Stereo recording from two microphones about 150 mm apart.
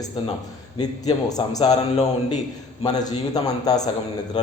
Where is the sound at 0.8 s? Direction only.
25° left (ahead or behind).